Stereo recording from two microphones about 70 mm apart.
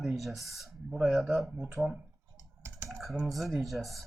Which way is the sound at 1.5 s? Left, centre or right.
Centre.